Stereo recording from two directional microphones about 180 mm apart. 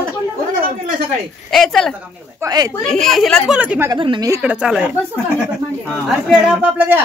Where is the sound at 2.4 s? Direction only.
20° right (ahead or behind).